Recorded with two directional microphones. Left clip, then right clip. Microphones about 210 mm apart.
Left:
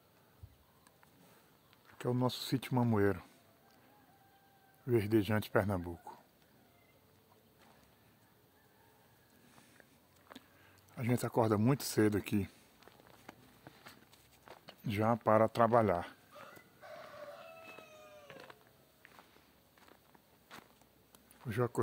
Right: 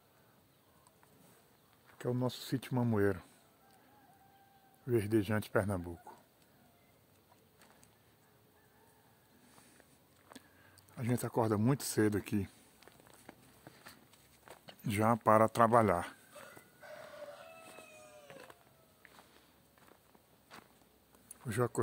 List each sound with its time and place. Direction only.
2.0 s speech: 5° left (ahead or behind)
4.8 s speech: 5° left (ahead or behind)
10.6 s speech: centre (ahead or behind)
13.3 s walk: 25° left (ahead or behind)
13.7 s walk: centre (ahead or behind)
14.7 s speech: 15° right (ahead or behind)
18.2 s cat: 10° left (ahead or behind)
20.5 s walk: 15° left (ahead or behind)
21.5 s a sound: 15° right (ahead or behind)